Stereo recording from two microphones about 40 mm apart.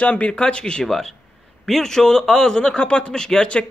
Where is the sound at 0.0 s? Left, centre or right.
Left.